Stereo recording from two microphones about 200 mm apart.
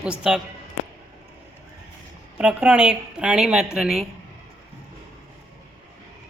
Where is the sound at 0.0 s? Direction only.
5° right (ahead or behind).